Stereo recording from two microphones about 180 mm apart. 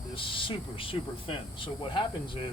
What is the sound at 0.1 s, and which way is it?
Speech, 30° left (ahead or behind).